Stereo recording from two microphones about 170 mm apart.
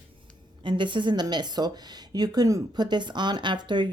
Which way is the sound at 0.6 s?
30° right (ahead or behind).